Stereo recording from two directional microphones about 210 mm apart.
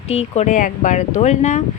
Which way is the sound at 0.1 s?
30° left (ahead or behind).